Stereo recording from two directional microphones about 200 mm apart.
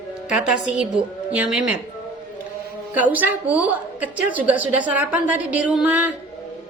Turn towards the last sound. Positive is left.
turn(degrees=-5)  # may be behind; listen again after turning